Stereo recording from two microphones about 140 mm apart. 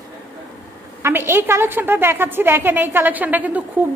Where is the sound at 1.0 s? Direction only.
20° right (ahead or behind).